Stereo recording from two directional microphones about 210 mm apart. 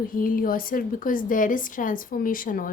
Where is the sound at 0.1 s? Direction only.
40° left (ahead or behind).